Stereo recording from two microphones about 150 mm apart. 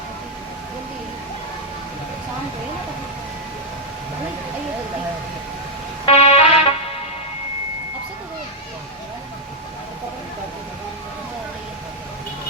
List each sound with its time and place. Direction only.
6.1 s music: 40° left (ahead or behind)